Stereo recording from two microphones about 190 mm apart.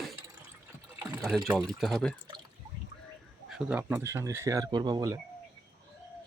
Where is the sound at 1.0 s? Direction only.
10° right (ahead or behind).